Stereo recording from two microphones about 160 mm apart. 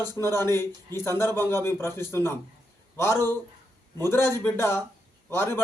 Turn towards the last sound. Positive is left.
turn(degrees=15)  # may be behind; listen again after turning